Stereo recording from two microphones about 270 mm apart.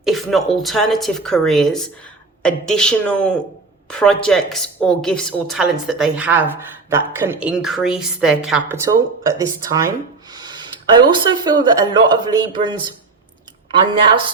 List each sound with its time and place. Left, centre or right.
0.0 s a woman's voice: centre
10.3 s a sound: centre
11.1 s speech: centre